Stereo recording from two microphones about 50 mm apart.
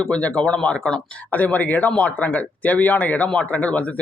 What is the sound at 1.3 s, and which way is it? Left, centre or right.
Speech, left.